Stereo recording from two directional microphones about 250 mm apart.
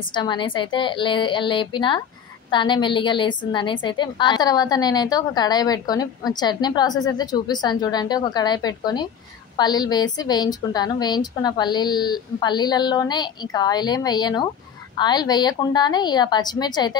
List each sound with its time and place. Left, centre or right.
0.1 s a woman's voice: centre